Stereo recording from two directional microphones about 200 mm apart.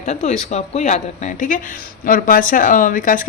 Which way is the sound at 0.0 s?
35° left (ahead or behind).